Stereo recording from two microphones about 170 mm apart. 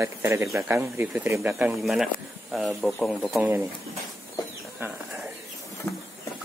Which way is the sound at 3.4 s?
15° right (ahead or behind).